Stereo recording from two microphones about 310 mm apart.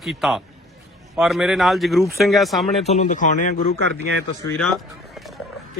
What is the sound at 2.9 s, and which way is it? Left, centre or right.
Speech, left.